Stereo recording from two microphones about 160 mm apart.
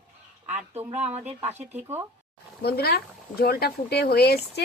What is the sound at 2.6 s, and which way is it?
Speech, 85° left.